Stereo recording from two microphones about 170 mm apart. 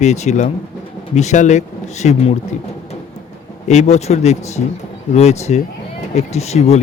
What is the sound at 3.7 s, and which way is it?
Speech, 40° left (ahead or behind).